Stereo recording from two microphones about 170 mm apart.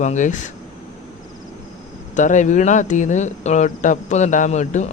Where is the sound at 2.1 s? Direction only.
45° left (ahead or behind).